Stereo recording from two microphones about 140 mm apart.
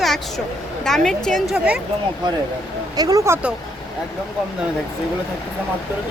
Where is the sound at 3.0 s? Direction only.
25° right (ahead or behind).